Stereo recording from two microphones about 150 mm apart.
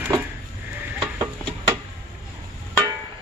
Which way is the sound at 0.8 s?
20° right (ahead or behind).